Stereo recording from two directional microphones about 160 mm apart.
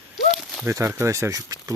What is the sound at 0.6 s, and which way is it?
Speech, 15° right (ahead or behind).